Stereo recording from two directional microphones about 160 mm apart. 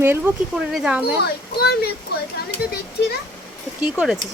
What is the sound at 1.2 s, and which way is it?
Speech, 90° left.